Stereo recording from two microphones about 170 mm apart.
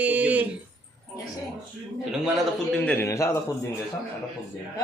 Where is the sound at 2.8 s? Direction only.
15° left (ahead or behind).